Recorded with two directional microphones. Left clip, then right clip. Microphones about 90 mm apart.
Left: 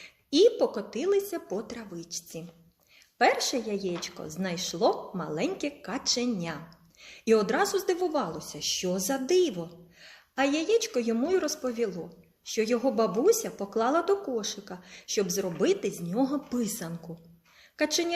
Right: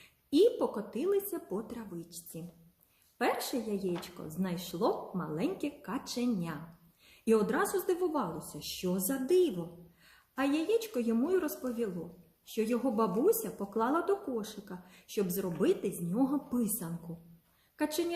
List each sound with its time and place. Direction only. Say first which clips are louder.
0.0 s a woman's voice: left 5 dB; 35° right (ahead or behind)
5.1 s a woman's voice: left 4 dB; 15° right (ahead or behind)
5.4 s a woman's voice: left 5 dB; 35° right (ahead or behind)
17.7 s a woman's voice: left 6 dB; 35° right (ahead or behind)